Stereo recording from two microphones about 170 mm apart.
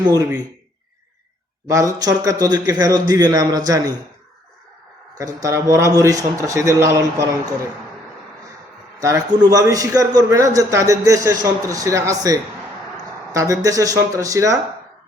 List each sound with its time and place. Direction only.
1.7 s a man's voice: 20° right (ahead or behind)
5.1 s a man's voice: 20° right (ahead or behind)
9.0 s a man's voice: 20° right (ahead or behind)